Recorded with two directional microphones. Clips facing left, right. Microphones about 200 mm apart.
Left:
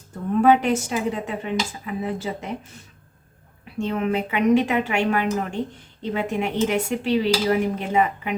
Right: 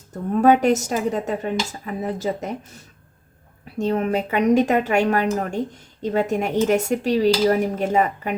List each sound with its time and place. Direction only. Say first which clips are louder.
0.4 s speech: right 3 dB; 40° right (ahead or behind)
3.8 s speech: right 2 dB; 40° right (ahead or behind)